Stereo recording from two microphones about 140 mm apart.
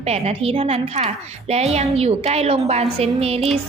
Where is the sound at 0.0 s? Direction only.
45° right (ahead or behind).